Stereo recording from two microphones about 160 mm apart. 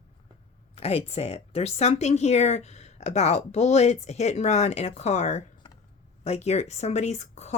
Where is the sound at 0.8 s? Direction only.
40° left (ahead or behind).